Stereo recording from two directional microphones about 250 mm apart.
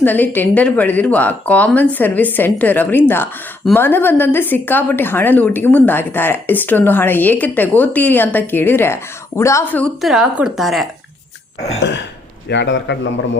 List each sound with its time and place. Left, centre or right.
0.0 s a woman's voice: centre
11.8 s a man's voice: left